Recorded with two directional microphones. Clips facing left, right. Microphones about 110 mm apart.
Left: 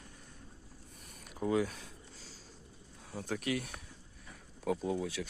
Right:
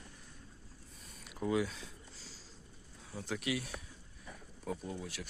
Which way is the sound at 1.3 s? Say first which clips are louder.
Left 2 dB; 40° left (ahead or behind).